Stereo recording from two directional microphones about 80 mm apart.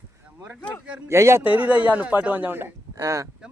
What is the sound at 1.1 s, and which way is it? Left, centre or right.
Speech, right.